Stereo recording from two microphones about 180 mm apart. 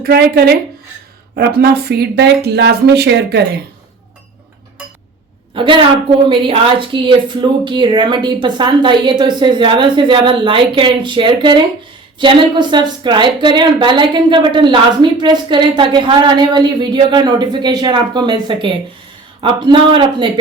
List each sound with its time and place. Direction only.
0.0 s speech: 60° right (ahead or behind)
5.5 s a woman's voice: 30° right (ahead or behind)